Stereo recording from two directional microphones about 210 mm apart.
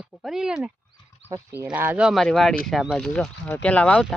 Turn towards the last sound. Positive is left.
turn(degrees=5)  # may be behind; listen again after turning